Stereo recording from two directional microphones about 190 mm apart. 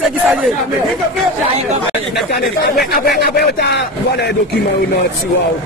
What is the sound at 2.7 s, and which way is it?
Speech, 55° left (ahead or behind).